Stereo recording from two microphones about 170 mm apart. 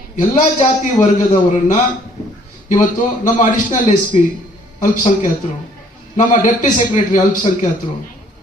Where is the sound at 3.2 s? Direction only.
50° left (ahead or behind).